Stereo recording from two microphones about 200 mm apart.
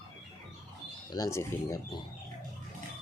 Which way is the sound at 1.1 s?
15° left (ahead or behind).